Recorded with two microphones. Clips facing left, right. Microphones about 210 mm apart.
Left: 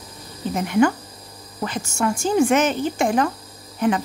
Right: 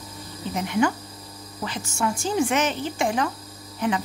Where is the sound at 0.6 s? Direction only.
50° left (ahead or behind).